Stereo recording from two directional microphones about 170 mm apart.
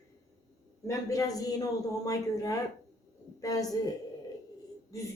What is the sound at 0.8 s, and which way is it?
Speech, 20° left (ahead or behind).